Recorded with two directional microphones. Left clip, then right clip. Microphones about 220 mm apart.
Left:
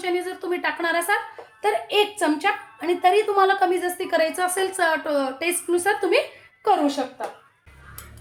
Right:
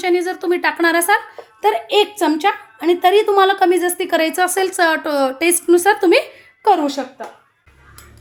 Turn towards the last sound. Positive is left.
turn(degrees=-50)  # may be behind; listen again after turning